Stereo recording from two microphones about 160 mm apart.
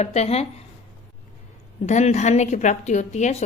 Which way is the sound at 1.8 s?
45° left (ahead or behind).